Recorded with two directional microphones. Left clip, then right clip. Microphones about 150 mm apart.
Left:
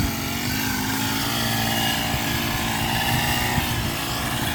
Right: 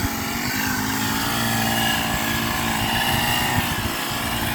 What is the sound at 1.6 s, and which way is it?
Vehicle, 10° left (ahead or behind).